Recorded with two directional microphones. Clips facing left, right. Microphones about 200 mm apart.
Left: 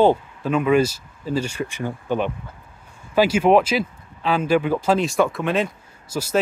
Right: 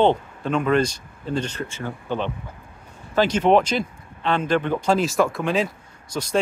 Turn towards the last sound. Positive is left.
turn(degrees=5)  # may be behind; listen again after turning